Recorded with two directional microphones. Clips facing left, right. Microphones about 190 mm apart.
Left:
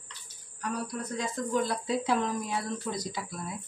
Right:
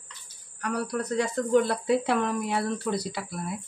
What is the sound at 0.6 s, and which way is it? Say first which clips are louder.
Speech: right 5 dB; 70° right (ahead or behind).